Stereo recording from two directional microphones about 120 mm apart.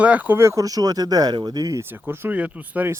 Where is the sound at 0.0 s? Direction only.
10° right (ahead or behind); by 1.8 s 35° right (ahead or behind).